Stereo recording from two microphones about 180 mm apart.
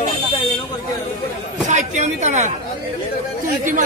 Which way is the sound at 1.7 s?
40° right (ahead or behind).